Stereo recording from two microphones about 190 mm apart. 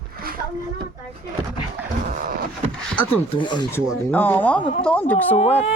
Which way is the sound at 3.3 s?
25° left (ahead or behind).